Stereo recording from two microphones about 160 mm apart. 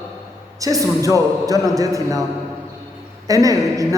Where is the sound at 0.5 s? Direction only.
20° right (ahead or behind).